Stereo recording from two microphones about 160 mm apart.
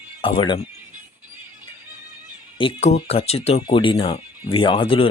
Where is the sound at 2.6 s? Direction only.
40° left (ahead or behind).